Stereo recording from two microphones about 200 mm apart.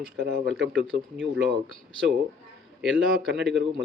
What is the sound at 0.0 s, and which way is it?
Speech, 55° right (ahead or behind).